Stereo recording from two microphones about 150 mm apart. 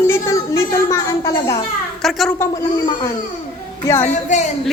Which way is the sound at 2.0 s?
Centre (ahead or behind).